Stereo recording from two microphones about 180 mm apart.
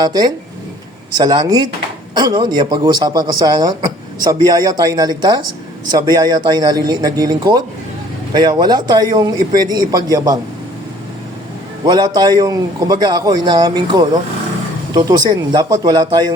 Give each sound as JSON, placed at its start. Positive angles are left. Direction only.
{"t": 0.0, "sound": "a man's voice", "side_deg": -20}
{"t": 11.9, "sound": "a man's voice", "side_deg": -25}